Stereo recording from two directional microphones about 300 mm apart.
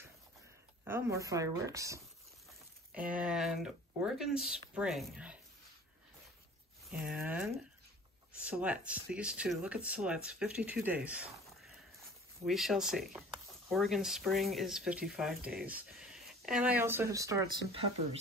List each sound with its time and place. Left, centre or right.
0.8 s a woman's voice: centre
6.9 s speech: centre